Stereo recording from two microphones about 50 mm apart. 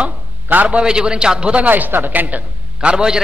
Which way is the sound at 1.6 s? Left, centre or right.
Right.